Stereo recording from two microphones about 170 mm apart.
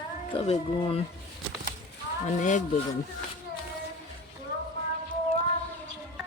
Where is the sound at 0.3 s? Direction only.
35° left (ahead or behind).